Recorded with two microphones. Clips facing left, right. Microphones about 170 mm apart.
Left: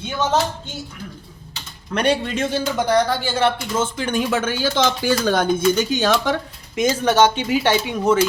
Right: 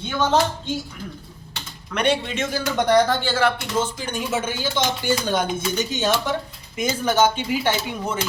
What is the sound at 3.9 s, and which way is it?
Speech, 90° left.